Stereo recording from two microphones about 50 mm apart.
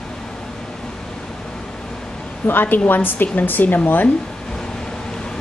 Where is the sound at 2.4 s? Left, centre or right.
Left.